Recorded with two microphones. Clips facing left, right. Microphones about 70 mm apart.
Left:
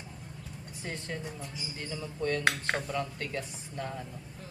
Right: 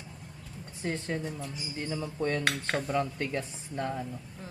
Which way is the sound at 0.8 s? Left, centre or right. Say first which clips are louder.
Right 6 dB; right.